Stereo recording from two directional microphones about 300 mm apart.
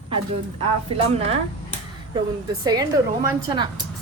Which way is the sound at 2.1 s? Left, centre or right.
Centre.